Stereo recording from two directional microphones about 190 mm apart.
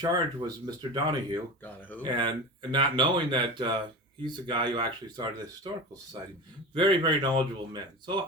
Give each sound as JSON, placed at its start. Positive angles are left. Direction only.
{"t": 0.0, "sound": "speech", "side_deg": -20}
{"t": 1.6, "sound": "speech", "side_deg": 10}
{"t": 2.0, "sound": "speech", "side_deg": -25}